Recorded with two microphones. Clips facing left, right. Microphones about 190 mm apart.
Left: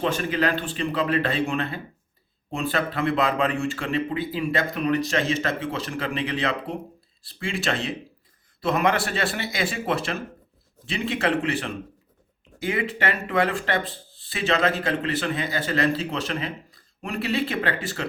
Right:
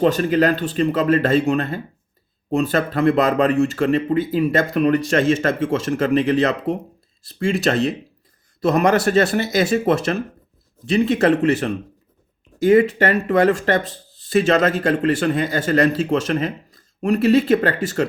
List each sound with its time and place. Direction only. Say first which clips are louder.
0.0 s speech: right 8 dB; 40° right (ahead or behind)